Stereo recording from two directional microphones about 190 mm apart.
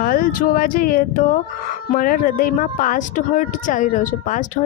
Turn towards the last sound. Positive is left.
turn(degrees=40)  # may be behind; listen again after turning